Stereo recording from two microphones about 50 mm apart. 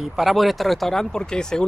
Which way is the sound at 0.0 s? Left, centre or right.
Centre.